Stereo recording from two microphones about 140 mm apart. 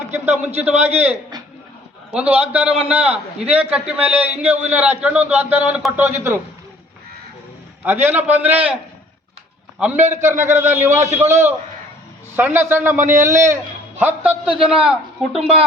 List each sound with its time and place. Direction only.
0.1 s a man's voice: 15° right (ahead or behind)
2.0 s a man's voice: 10° right (ahead or behind)
7.9 s a man's voice: 15° right (ahead or behind)
14.0 s a man's voice: 10° right (ahead or behind)